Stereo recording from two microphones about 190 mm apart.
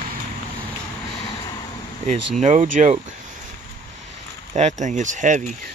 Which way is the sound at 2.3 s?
40° right (ahead or behind).